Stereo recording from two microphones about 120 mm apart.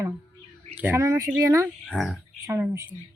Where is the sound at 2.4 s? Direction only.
25° right (ahead or behind).